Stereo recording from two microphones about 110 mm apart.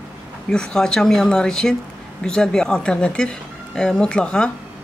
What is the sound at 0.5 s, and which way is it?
A woman's voice, 5° left (ahead or behind).